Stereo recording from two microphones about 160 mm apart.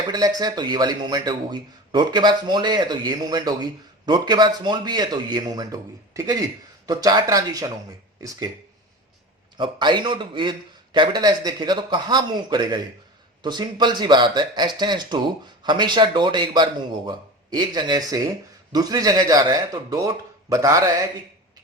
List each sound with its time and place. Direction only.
0.1 s a man's voice: 25° right (ahead or behind)
9.6 s a man's voice: 30° right (ahead or behind)